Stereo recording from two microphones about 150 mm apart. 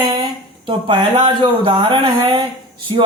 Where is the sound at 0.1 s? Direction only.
30° right (ahead or behind).